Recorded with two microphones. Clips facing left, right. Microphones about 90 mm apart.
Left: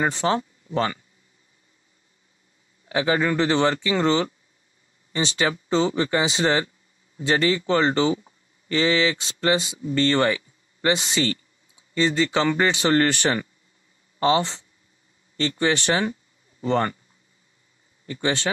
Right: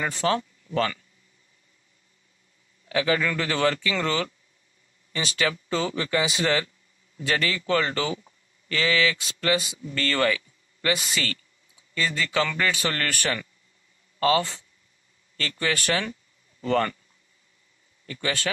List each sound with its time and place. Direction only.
0.0 s speech: 25° left (ahead or behind)
2.9 s speech: 25° left (ahead or behind)
18.0 s speech: 25° left (ahead or behind)